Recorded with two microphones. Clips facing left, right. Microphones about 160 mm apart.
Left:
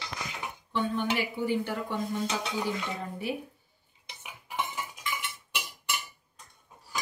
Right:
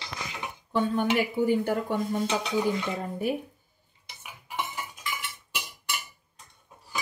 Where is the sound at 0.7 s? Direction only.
45° right (ahead or behind).